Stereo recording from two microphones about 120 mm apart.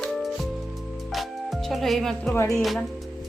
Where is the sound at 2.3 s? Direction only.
20° left (ahead or behind).